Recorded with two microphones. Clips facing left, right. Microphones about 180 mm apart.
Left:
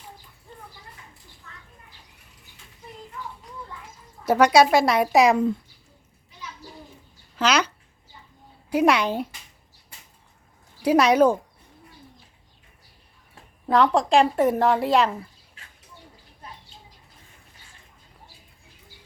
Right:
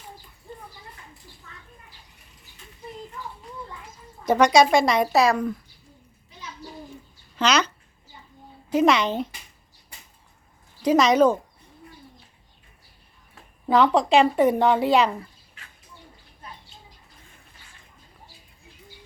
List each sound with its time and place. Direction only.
4.2 s speech: 5° left (ahead or behind)
5.2 s speech: 20° left (ahead or behind)
7.3 s speech: 10° left (ahead or behind)
8.7 s speech: 10° left (ahead or behind)
10.8 s speech: 10° left (ahead or behind)
13.7 s speech: centre (ahead or behind)